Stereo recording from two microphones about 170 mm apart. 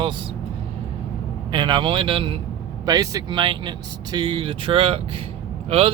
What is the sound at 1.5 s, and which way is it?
Speech, 30° right (ahead or behind).